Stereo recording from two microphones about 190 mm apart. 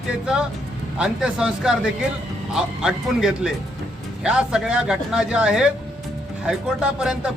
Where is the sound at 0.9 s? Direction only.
5° right (ahead or behind).